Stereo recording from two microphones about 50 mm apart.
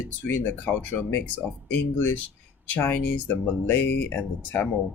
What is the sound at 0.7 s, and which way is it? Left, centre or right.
Speech, left.